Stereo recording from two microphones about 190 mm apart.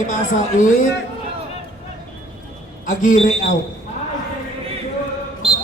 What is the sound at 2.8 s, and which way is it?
Speech, 40° left (ahead or behind).